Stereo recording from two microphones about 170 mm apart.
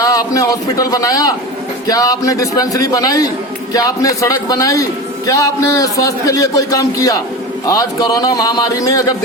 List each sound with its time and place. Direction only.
0.0 s a man's voice: 20° left (ahead or behind)